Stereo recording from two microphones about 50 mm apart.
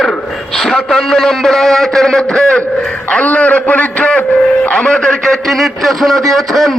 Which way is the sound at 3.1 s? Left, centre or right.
Left.